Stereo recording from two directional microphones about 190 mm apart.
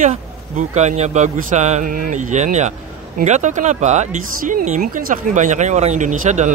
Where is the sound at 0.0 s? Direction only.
40° right (ahead or behind).